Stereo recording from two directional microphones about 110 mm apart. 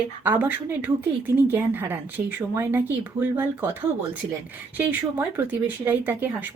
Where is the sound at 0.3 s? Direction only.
20° right (ahead or behind).